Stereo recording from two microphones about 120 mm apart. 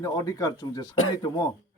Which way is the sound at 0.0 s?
30° left (ahead or behind).